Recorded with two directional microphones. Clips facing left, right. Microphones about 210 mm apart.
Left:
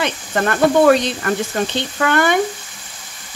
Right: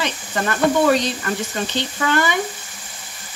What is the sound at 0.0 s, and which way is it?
Speech, 55° left (ahead or behind).